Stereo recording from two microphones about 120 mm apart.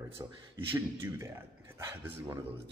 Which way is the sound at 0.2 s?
35° right (ahead or behind).